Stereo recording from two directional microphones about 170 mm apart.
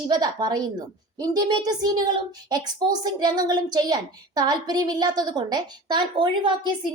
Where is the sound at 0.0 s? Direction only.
25° right (ahead or behind).